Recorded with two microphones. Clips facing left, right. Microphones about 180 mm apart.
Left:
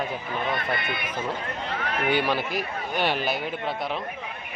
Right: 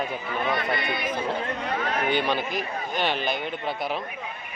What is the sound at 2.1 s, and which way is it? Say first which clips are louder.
A man's voice: even; 5° left (ahead or behind).